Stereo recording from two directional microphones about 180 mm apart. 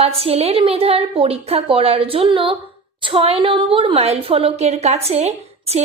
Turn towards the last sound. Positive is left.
turn(degrees=-35)  # may be behind; listen again after turning